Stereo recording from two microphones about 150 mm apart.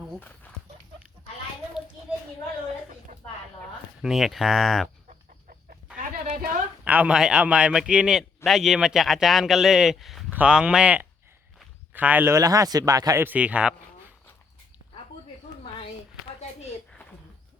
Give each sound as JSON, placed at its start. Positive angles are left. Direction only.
{"t": 0.2, "sound": "dog", "side_deg": 10}
{"t": 4.0, "sound": "a man's voice", "side_deg": -5}
{"t": 6.0, "sound": "a sound", "side_deg": -50}
{"t": 6.8, "sound": "a man's voice", "side_deg": -10}